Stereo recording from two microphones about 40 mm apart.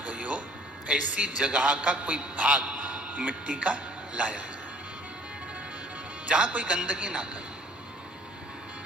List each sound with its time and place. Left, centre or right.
0.0 s a sound: right
0.9 s a man's voice: right
6.2 s a man's voice: right